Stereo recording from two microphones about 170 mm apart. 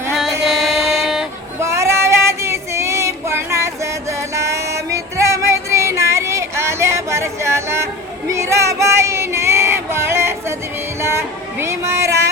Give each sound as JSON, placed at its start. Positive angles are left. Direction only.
{"t": 0.2, "sound": "music", "side_deg": 0}
{"t": 1.5, "sound": "child singing", "side_deg": -15}
{"t": 4.4, "sound": "music", "side_deg": -15}
{"t": 8.3, "sound": "female singing", "side_deg": -15}
{"t": 11.0, "sound": "music", "side_deg": -15}